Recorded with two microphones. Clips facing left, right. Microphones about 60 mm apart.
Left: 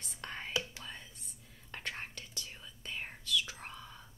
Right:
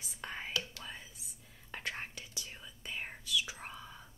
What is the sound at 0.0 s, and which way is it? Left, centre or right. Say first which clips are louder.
Whispering: right 1 dB; centre.